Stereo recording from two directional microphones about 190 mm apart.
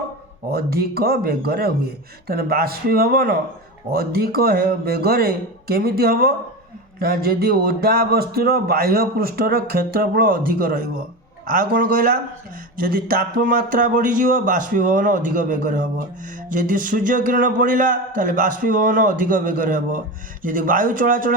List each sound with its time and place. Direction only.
0.5 s speech: 55° right (ahead or behind)